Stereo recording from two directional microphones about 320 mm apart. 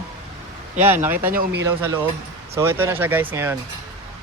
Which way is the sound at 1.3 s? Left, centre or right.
Right.